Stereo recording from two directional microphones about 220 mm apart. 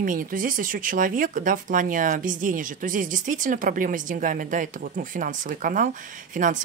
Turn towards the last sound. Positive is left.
turn(degrees=-35)  # may be behind; listen again after turning